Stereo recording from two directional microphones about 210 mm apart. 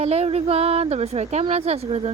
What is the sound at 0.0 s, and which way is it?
A woman's voice, 30° right (ahead or behind).